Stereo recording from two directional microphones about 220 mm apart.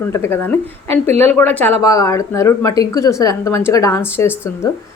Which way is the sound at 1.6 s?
10° left (ahead or behind).